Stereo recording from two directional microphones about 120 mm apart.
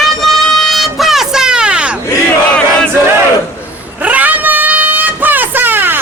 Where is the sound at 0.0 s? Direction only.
Centre (ahead or behind).